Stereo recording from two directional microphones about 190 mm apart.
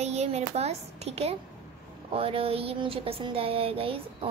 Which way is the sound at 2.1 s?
30° right (ahead or behind).